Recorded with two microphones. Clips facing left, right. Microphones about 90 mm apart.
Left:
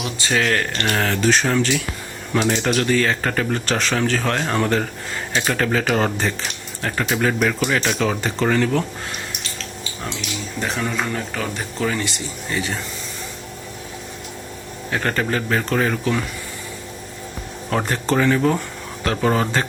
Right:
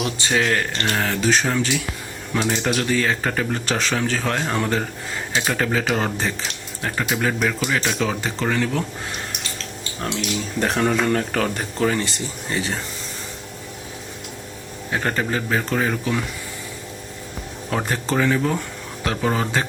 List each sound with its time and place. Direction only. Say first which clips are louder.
0.2 s music: left 2 dB; 20° right (ahead or behind)
0.9 s speech: left 2 dB; 5° right (ahead or behind)
10.6 s speech: right 4 dB; 50° right (ahead or behind)
11.8 s speech: right 2 dB; 35° right (ahead or behind)
14.8 s speech: left 1 dB; 15° right (ahead or behind)
17.7 s speech: left 2 dB; 5° right (ahead or behind)